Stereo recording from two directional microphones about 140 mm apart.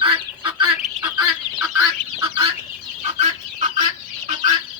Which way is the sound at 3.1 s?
50° right (ahead or behind).